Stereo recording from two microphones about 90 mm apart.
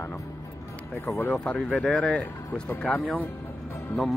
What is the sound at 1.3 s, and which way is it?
Speech, 5° left (ahead or behind).